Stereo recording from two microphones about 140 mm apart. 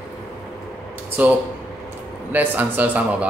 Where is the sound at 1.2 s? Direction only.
10° right (ahead or behind).